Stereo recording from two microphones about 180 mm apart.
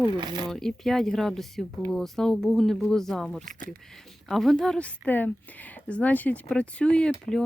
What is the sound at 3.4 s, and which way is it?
Speech, 45° right (ahead or behind).